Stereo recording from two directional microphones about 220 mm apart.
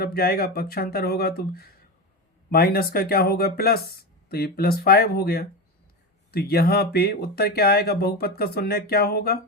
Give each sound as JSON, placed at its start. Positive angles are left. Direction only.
{"t": 0.0, "sound": "speech", "side_deg": 45}